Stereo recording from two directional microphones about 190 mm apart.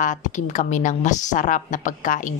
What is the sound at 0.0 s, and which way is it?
A woman's voice, 40° left (ahead or behind).